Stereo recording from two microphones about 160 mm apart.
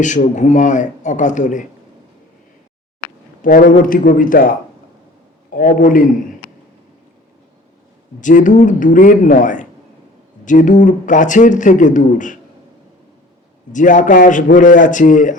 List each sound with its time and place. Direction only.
0.3 s speech: 50° left (ahead or behind)
3.4 s a man's voice: 60° left (ahead or behind)
5.5 s a man's voice: 60° left (ahead or behind)
8.2 s speech: 55° left (ahead or behind)
13.7 s speech: 55° left (ahead or behind)